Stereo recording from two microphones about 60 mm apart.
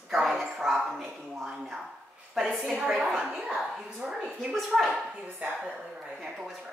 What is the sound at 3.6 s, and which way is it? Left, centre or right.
A woman's voice, centre.